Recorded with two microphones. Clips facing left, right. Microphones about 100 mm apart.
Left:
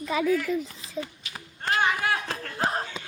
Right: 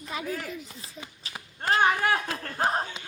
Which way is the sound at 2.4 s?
40° right (ahead or behind).